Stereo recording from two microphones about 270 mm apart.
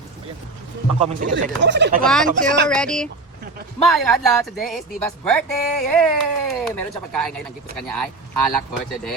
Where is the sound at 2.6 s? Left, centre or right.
Centre.